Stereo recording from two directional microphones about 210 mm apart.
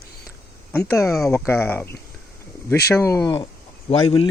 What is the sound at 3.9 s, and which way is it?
Speech, 25° left (ahead or behind).